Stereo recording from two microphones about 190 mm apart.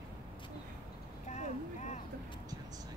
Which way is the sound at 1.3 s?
35° left (ahead or behind).